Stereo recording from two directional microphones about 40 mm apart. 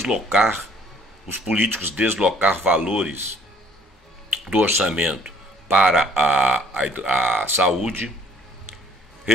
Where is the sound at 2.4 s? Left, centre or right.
Right.